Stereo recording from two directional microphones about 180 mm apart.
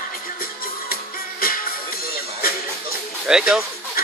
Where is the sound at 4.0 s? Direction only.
55° left (ahead or behind).